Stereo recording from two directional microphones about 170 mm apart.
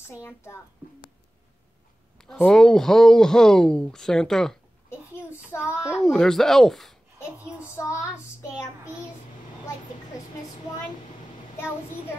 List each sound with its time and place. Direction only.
0.1 s child singing: 15° left (ahead or behind)
2.1 s speech: 5° left (ahead or behind)
5.1 s child singing: 15° left (ahead or behind)
5.9 s speech: 5° left (ahead or behind)
7.6 s child singing: 15° left (ahead or behind)